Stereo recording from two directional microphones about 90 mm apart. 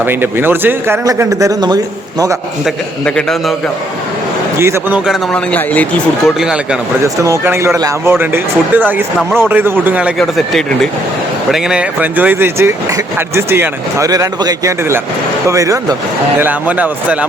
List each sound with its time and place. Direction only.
0.0 s speech: 25° right (ahead or behind)
1.0 s a man's voice: 40° right (ahead or behind)
3.0 s speech: 5° left (ahead or behind)
4.5 s a man's voice: 30° right (ahead or behind)
5.3 s speech: 15° left (ahead or behind)
6.2 s speech: 5° right (ahead or behind)
7.0 s a man's voice: 35° right (ahead or behind); by 10.1 s 20° right (ahead or behind)
10.2 s speech: 5° left (ahead or behind)
11.5 s speech: 5° right (ahead or behind); by 14.1 s 30° right (ahead or behind)
14.1 s a man's voice: 40° right (ahead or behind)
16.4 s speech: 20° right (ahead or behind)